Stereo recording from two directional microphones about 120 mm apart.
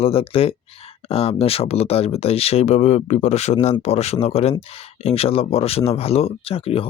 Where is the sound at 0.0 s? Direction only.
55° left (ahead or behind).